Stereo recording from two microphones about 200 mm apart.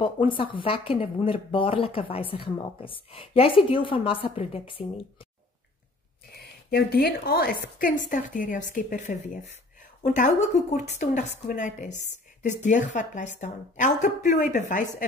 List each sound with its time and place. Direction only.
0.0 s speech: 25° left (ahead or behind)
6.3 s a woman's voice: 50° left (ahead or behind)